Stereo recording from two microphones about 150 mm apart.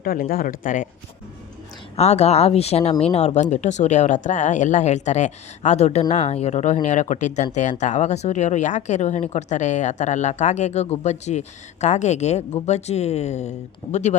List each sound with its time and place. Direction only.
0.0 s speech: 75° left (ahead or behind)
2.0 s speech: 45° left (ahead or behind)